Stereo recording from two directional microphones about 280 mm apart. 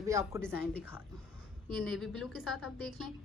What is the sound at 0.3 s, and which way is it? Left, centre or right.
Speech, centre.